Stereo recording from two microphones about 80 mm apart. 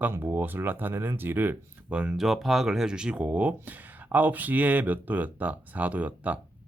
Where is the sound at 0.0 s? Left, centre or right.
Right.